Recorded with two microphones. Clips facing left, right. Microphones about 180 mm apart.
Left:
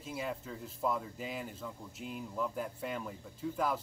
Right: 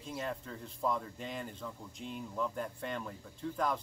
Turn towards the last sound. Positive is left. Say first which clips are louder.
# even
turn(degrees=5)  # may be behind; listen again after turning